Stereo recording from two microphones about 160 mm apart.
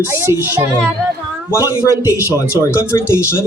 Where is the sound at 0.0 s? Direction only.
15° right (ahead or behind).